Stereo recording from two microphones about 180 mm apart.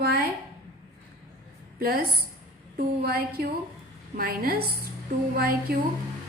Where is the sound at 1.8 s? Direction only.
55° right (ahead or behind).